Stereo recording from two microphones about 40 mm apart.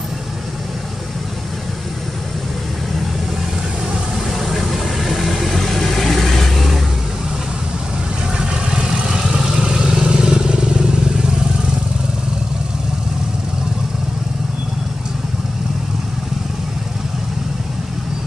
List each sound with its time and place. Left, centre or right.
4.4 s vehicle: centre
8.4 s vehicle: centre